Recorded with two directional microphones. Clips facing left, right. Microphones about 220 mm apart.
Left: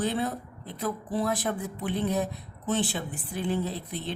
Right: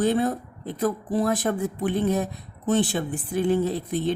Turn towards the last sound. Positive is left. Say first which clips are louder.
# right 9 dB
turn(degrees=-45)  # may be behind; listen again after turning